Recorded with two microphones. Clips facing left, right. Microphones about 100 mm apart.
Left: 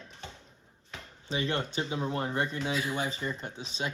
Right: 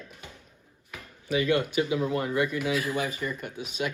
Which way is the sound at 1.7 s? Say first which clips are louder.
Right 6 dB; 30° left (ahead or behind).